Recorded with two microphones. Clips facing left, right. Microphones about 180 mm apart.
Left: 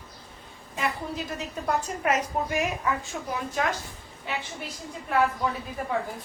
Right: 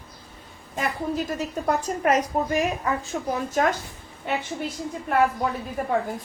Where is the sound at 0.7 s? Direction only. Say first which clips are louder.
Right 4 dB; 45° right (ahead or behind).